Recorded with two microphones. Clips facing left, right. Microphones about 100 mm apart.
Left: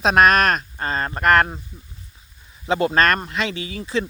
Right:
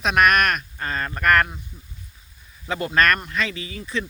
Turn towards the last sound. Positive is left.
turn(degrees=30)  # may be behind; listen again after turning